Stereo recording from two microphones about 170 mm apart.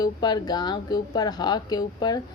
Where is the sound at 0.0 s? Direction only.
25° left (ahead or behind).